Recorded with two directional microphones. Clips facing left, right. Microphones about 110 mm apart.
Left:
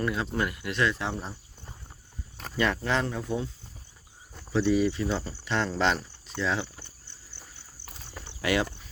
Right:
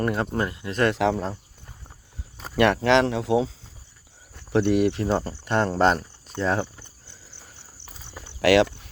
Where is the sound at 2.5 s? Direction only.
65° right (ahead or behind); by 3.5 s 90° right.